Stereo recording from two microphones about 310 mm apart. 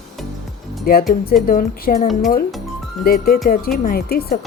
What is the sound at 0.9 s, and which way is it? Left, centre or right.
Speech, left.